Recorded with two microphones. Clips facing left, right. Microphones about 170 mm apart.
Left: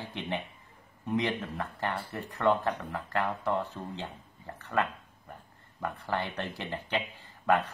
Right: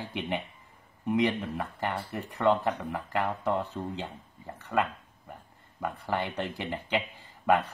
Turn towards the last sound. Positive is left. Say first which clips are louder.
# right 2 dB
turn(degrees=-15)  # may be behind; listen again after turning